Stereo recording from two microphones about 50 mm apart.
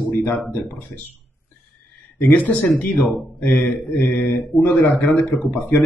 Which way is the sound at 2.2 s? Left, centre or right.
Left.